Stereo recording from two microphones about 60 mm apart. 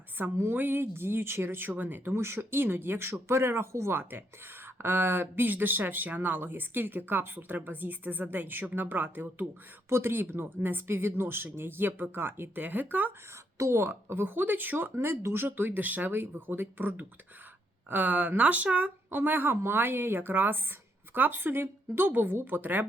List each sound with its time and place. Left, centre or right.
0.2 s speech: right
2.1 s speech: right
13.3 s speech: right